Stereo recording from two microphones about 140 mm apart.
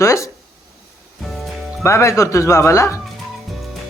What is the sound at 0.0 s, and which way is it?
Speech, 20° left (ahead or behind).